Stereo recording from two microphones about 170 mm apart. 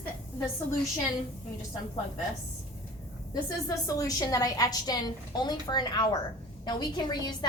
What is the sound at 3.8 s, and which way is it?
A woman's voice, 20° left (ahead or behind).